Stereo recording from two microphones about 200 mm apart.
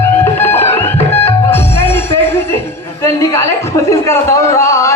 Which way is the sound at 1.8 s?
10° left (ahead or behind).